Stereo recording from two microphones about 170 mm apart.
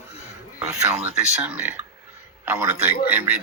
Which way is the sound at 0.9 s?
5° right (ahead or behind).